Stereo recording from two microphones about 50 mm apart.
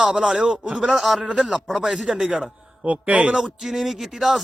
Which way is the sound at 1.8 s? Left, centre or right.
Centre.